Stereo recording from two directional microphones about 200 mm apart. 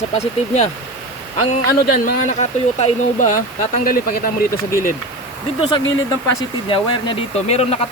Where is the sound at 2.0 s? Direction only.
35° left (ahead or behind).